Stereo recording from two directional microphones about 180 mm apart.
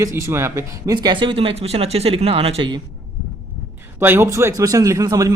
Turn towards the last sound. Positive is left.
turn(degrees=-20)  # may be behind; listen again after turning